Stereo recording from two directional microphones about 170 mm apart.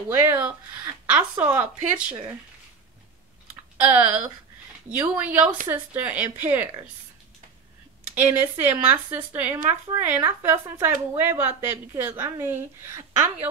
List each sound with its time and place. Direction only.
1.0 s speech: 10° right (ahead or behind)
3.8 s speech: 10° right (ahead or behind)
8.1 s speech: 10° right (ahead or behind)